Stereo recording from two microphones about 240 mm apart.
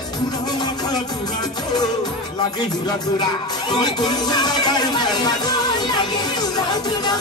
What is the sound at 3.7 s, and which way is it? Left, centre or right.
Music, centre.